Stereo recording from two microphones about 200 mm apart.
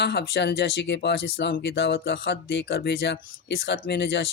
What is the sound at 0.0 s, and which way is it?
Speech, 55° left (ahead or behind).